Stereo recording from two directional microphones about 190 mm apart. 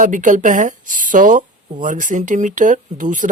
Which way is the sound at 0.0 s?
40° right (ahead or behind).